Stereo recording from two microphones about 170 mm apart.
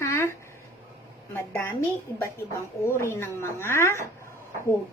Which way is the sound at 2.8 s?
15° left (ahead or behind).